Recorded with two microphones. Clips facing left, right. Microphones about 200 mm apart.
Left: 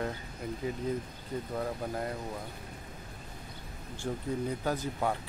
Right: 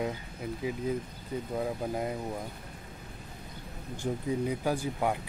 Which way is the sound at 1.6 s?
15° right (ahead or behind).